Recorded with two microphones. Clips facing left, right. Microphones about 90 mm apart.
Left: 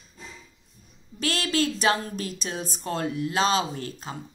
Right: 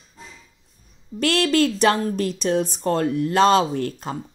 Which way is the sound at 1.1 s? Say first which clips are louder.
Right 7 dB; 55° right (ahead or behind).